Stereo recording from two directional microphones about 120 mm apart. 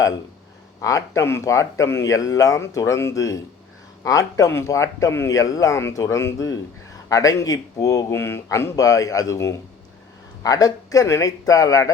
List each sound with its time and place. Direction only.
0.8 s speech: 25° left (ahead or behind)